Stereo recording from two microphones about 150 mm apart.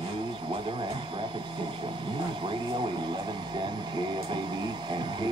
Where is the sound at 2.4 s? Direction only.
35° right (ahead or behind).